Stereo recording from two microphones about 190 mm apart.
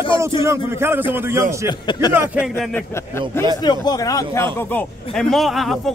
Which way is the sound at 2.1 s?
5° right (ahead or behind).